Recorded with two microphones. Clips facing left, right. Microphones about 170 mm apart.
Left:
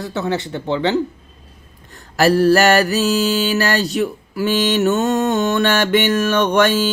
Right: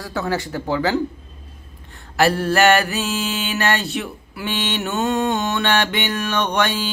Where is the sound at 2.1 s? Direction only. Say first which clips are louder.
Left 5 dB; 40° left (ahead or behind).